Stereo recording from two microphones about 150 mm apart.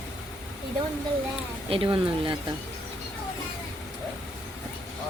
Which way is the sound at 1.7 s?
35° right (ahead or behind).